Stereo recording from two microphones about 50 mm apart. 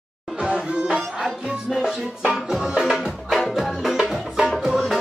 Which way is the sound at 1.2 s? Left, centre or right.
Centre.